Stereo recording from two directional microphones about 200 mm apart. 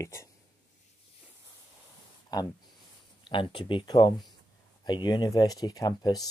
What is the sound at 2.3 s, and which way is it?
Speech, 20° left (ahead or behind).